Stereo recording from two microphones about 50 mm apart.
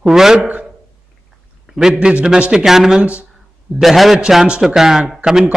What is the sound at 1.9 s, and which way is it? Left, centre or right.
Speech, right.